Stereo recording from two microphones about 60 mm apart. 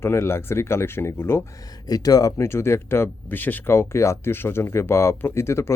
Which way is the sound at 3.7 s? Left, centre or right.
Left.